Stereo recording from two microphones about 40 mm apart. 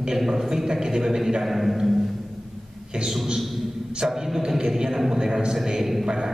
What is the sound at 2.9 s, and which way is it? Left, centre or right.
Speech, right.